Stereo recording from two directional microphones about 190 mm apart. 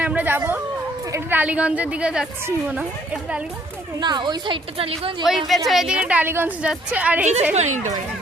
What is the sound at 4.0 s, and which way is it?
A woman's voice, 25° right (ahead or behind).